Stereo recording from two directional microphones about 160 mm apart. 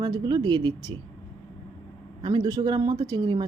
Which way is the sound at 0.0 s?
25° right (ahead or behind).